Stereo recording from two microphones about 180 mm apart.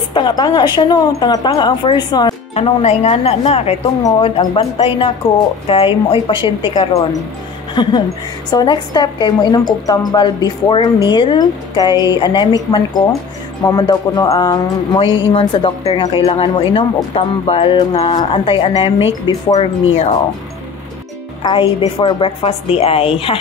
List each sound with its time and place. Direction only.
0.1 s a woman's voice: 25° left (ahead or behind)
2.5 s a woman's voice: 35° left (ahead or behind)
21.5 s a woman's voice: 25° left (ahead or behind)